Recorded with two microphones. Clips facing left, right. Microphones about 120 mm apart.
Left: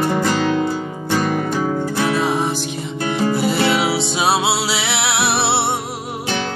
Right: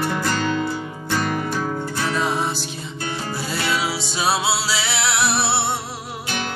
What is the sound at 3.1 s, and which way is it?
Music, 60° left (ahead or behind).